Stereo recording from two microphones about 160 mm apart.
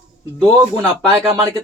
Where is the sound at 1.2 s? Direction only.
25° right (ahead or behind).